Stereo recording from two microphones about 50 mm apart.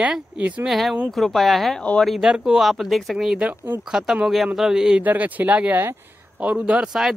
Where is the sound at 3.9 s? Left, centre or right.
Centre.